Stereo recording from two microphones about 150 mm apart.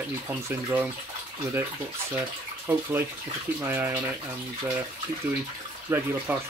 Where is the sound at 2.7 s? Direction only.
15° right (ahead or behind).